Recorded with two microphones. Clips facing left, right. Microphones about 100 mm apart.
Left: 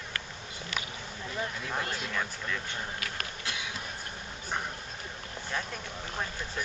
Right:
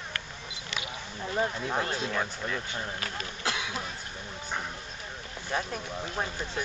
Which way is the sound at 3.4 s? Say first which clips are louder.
Right 8 dB; 90° right.